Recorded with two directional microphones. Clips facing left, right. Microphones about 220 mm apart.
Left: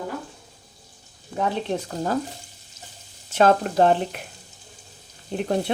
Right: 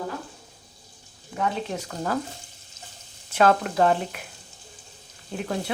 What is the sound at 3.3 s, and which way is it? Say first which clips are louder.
Speech: left 2 dB; 30° left (ahead or behind).